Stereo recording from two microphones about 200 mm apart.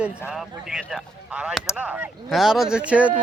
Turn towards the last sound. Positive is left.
turn(degrees=-5)  # may be behind; listen again after turning